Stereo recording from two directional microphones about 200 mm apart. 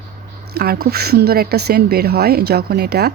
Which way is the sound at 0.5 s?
50° right (ahead or behind).